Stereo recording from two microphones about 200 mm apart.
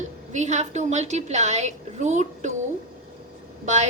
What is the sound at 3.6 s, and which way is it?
Speech, 35° right (ahead or behind).